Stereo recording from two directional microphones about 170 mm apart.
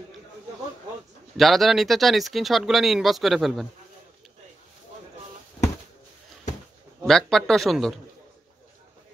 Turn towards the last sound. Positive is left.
turn(degrees=0)  # may be behind; listen again after turning